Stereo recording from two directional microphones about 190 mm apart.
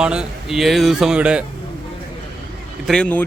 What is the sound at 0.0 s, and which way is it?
Speech, 5° right (ahead or behind).